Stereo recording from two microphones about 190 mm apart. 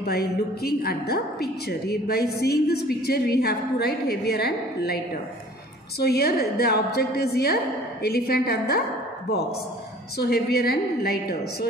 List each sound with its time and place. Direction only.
0.0 s a woman's voice: 55° left (ahead or behind)
10.1 s a woman's voice: 55° left (ahead or behind)